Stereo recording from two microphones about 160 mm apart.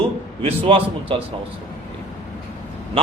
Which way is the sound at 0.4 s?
35° right (ahead or behind).